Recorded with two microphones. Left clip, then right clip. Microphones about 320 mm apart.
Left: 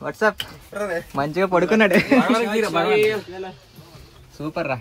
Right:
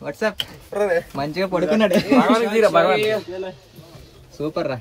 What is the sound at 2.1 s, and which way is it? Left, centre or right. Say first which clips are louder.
Speech: right 2 dB; centre.